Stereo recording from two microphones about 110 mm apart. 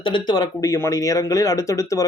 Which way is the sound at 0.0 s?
45° left (ahead or behind).